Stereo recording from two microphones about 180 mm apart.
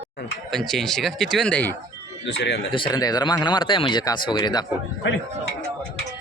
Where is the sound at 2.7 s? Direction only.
25° left (ahead or behind).